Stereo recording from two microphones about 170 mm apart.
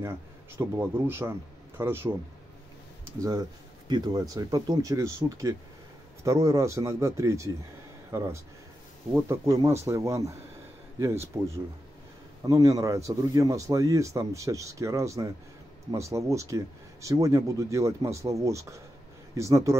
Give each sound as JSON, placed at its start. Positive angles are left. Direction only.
{"t": 0.0, "sound": "speech", "side_deg": -15}
{"t": 3.2, "sound": "a man's voice", "side_deg": -20}
{"t": 11.3, "sound": "a man's voice", "side_deg": -15}